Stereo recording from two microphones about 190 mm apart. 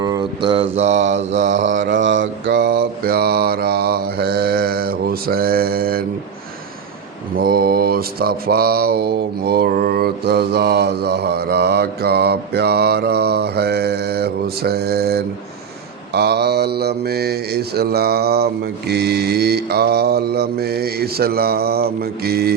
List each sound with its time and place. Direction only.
0.0 s mantra: 20° right (ahead or behind)
1.6 s mantra: 75° right (ahead or behind)
2.6 s mantra: 55° right (ahead or behind)
7.3 s mantra: 50° right (ahead or behind)